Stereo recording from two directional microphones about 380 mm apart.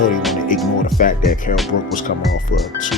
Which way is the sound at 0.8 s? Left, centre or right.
Left.